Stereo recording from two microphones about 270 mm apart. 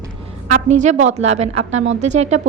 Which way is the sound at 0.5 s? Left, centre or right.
Right.